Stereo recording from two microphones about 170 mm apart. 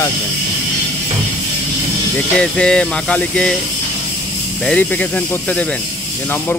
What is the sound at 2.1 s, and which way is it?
Speech, 5° left (ahead or behind).